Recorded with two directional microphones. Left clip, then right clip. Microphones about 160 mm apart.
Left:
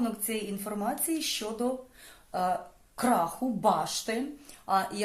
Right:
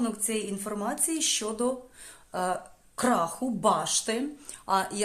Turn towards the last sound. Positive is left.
turn(degrees=-25)  # may be behind; listen again after turning